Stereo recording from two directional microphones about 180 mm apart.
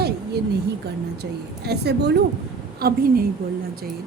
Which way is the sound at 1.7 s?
65° right (ahead or behind).